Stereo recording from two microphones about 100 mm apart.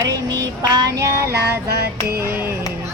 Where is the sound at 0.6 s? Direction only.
40° right (ahead or behind).